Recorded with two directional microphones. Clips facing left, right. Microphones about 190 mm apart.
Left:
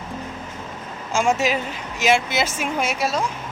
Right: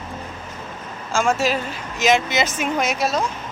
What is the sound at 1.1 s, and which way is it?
Speech, 20° left (ahead or behind).